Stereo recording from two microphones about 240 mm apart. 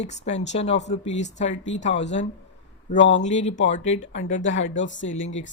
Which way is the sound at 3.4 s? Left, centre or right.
Left.